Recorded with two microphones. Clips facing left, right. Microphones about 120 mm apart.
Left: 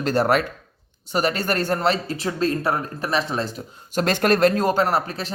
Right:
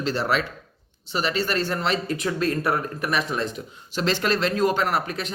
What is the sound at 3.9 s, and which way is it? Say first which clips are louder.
Speech: left 4 dB; 50° left (ahead or behind).